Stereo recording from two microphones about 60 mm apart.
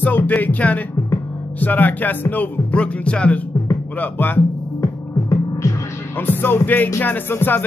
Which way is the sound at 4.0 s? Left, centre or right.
Left.